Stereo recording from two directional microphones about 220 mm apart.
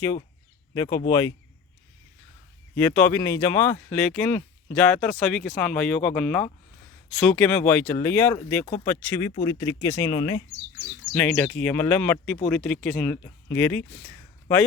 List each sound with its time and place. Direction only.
0.7 s speech: 15° left (ahead or behind)
2.7 s speech: 10° left (ahead or behind)
10.8 s speech: 5° left (ahead or behind)